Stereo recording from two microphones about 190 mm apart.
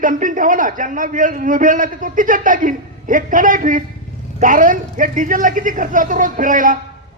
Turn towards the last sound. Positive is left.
turn(degrees=-45)  # may be behind; listen again after turning